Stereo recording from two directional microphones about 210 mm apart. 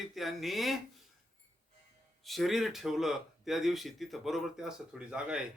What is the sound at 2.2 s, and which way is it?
Speech, centre (ahead or behind).